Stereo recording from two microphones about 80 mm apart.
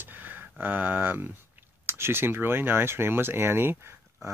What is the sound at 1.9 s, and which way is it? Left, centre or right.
Speech, right.